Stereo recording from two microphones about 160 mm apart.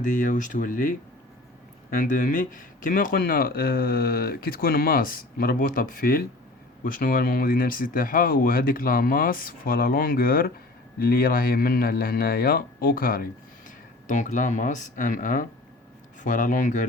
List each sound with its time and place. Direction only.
0.0 s speech: 55° left (ahead or behind)